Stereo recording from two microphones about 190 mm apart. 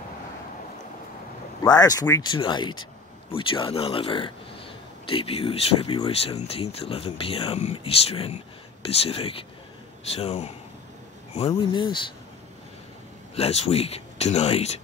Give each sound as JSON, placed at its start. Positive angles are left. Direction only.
{"t": 1.6, "sound": "speech", "side_deg": 20}
{"t": 13.3, "sound": "speech", "side_deg": 35}